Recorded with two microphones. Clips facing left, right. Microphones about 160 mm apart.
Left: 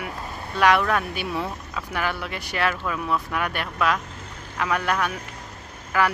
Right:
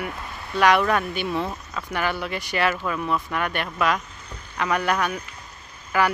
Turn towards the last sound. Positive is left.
turn(degrees=0)  # may be behind; listen again after turning